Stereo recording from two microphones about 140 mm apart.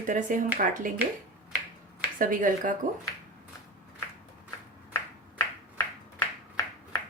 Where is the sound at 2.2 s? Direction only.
75° right (ahead or behind).